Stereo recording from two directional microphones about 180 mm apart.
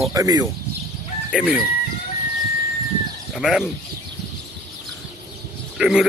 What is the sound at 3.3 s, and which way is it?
Speech, centre (ahead or behind).